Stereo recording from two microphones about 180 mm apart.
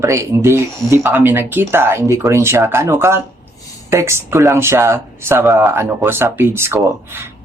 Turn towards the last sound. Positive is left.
turn(degrees=-15)  # may be behind; listen again after turning